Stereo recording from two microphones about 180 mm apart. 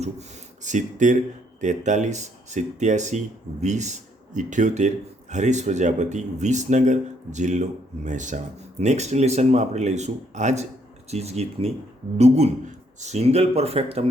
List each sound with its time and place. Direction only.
0.0 s speech: 40° right (ahead or behind)